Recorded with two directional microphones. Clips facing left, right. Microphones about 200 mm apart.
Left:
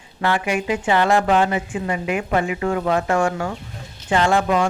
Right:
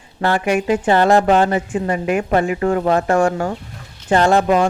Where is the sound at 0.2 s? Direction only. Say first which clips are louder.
Right 4 dB; 40° right (ahead or behind).